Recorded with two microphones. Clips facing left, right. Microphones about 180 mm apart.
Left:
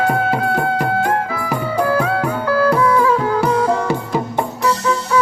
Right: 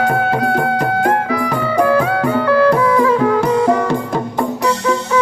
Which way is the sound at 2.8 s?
25° right (ahead or behind).